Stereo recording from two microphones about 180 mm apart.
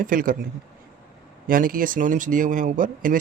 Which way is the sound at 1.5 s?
50° right (ahead or behind).